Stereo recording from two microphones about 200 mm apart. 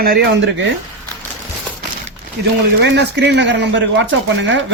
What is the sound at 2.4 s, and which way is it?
Speech, 55° right (ahead or behind).